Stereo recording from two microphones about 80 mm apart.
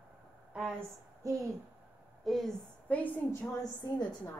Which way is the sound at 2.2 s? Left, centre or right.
Centre.